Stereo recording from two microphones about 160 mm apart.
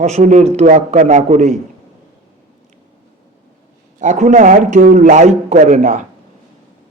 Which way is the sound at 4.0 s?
50° right (ahead or behind).